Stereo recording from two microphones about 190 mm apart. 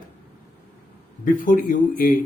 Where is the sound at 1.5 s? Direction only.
45° left (ahead or behind).